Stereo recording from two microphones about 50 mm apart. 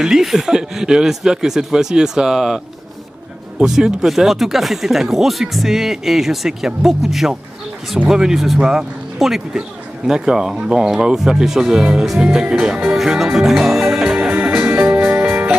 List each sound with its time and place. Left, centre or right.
0.0 s speech: centre
3.6 s speech: centre
12.9 s speech: centre
14.0 s music: centre
14.3 s music: right